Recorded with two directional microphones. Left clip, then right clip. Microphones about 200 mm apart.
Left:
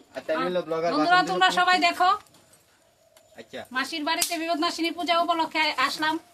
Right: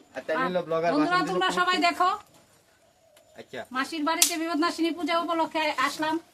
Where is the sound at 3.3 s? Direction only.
15° right (ahead or behind).